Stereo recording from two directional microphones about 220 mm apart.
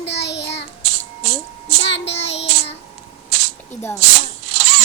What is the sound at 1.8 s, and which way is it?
Child singing, 55° left (ahead or behind).